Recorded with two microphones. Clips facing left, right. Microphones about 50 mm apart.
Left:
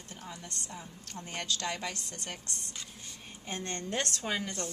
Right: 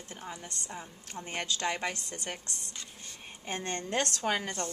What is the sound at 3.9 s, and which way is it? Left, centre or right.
Speech, right.